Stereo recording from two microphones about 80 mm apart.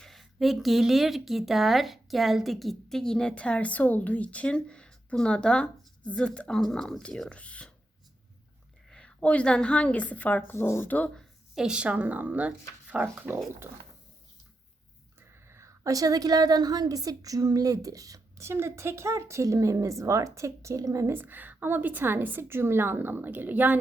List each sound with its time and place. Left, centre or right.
0.0 s speech: centre
8.9 s speech: centre; by 10.9 s left
11.5 s a woman's voice: centre; by 13.7 s right
15.4 s a woman's voice: right
21.1 s a woman's voice: right